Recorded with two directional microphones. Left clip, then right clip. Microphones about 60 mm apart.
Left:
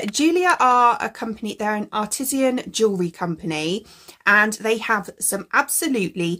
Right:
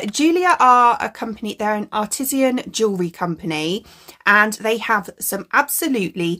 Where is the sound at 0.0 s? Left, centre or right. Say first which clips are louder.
Right 2 dB; right.